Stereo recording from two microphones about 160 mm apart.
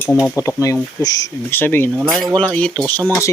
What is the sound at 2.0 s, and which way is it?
Speech, centre (ahead or behind).